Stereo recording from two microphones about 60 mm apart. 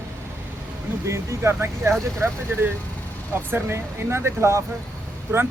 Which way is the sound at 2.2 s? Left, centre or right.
Right.